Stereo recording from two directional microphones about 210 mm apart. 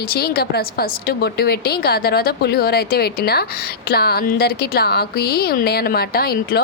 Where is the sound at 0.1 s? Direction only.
45° left (ahead or behind).